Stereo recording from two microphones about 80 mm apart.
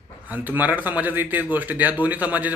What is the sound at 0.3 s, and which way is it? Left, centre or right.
A man's voice, right.